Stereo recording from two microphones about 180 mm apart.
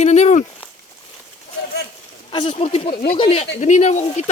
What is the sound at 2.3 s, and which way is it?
Speech, 30° left (ahead or behind).